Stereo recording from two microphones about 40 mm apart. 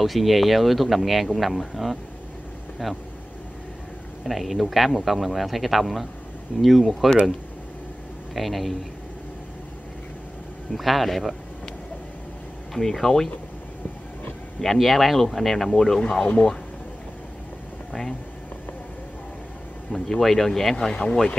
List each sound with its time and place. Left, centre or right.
0.0 s speech: centre
4.2 s speech: centre
8.4 s speech: centre
10.7 s speech: centre
12.7 s speech: centre
14.6 s speech: centre
16.0 s speech: centre
19.9 s speech: centre
20.9 s speech: left